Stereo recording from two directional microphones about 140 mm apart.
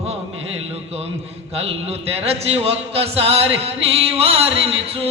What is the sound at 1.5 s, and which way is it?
Speech, 45° right (ahead or behind).